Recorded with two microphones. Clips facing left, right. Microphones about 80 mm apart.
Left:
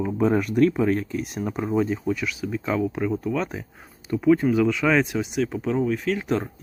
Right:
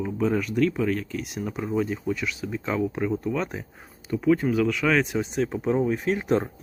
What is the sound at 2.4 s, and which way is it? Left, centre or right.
Speech, centre.